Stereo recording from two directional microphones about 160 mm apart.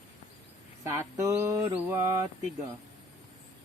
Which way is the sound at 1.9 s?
20° right (ahead or behind).